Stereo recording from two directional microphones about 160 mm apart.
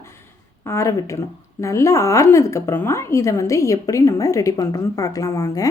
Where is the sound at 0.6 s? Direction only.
20° left (ahead or behind).